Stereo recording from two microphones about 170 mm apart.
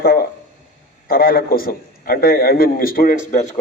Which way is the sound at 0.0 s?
65° left (ahead or behind).